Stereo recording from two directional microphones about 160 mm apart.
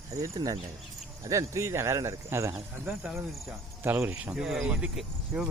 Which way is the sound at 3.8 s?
15° right (ahead or behind).